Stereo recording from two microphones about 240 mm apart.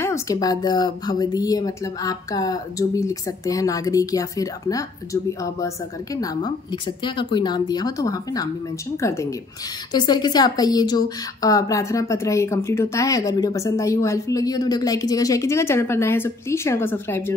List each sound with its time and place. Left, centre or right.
0.0 s a woman's voice: centre